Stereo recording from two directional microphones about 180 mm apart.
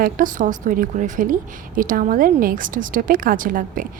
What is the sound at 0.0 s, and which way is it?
Speech, 50° right (ahead or behind).